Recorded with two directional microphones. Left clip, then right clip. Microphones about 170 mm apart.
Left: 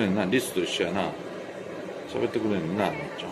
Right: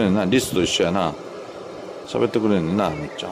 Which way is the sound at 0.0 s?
50° right (ahead or behind).